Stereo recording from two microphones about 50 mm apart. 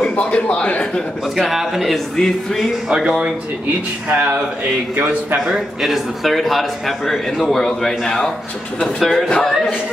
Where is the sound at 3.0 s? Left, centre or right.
Right.